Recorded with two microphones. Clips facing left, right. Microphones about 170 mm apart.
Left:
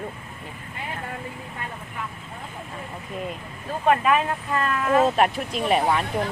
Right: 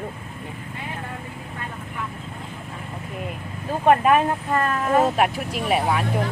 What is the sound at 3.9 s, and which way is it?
Speech, 45° right (ahead or behind).